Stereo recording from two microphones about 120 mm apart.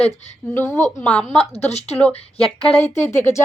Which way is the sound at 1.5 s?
65° left (ahead or behind).